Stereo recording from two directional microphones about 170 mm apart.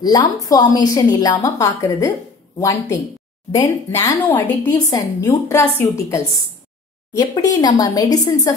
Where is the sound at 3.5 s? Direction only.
15° left (ahead or behind).